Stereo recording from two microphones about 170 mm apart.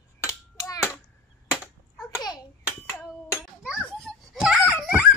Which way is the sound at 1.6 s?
20° left (ahead or behind).